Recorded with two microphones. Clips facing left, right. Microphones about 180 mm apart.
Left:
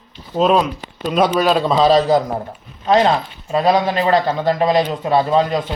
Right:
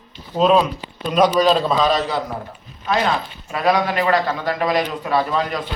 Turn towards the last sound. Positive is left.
turn(degrees=25)  # may be behind; listen again after turning